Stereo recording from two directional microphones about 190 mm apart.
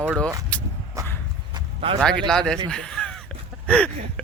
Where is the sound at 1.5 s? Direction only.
25° right (ahead or behind).